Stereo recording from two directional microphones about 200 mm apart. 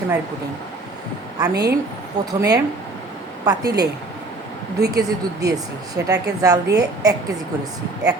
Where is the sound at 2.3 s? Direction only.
15° right (ahead or behind).